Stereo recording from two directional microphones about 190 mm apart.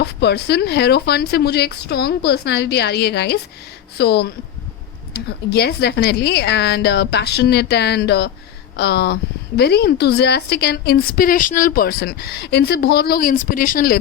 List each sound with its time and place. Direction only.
0.0 s a woman's voice: 60° left (ahead or behind)